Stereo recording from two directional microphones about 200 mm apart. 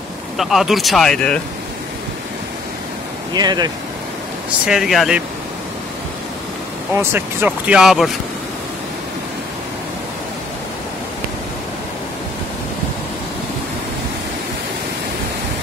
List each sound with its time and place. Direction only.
0.4 s speech: centre (ahead or behind)
3.3 s speech: 20° right (ahead or behind)
4.6 s speech: centre (ahead or behind)
7.0 s speech: 10° right (ahead or behind)